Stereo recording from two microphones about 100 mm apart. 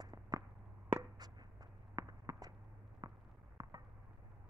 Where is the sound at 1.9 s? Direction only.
35° right (ahead or behind).